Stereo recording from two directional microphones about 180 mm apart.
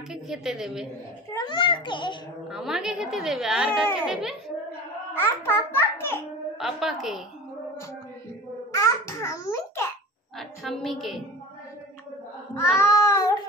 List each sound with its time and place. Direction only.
0.1 s a child's voice: 5° right (ahead or behind)
1.3 s a child's voice: 25° left (ahead or behind)
2.5 s a child's voice: 5° right (ahead or behind)
5.1 s a child's voice: 10° left (ahead or behind)
6.6 s a child's voice: centre (ahead or behind)
8.7 s babbling: 15° left (ahead or behind)
10.3 s a woman's voice: centre (ahead or behind)
12.7 s child singing: 15° left (ahead or behind)